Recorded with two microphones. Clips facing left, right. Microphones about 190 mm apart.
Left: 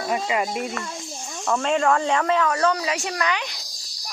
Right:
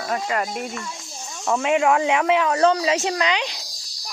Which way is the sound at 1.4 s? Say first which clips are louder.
Right 2 dB; 10° right (ahead or behind).